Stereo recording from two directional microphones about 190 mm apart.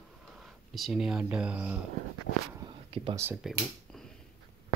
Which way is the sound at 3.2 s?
5° right (ahead or behind).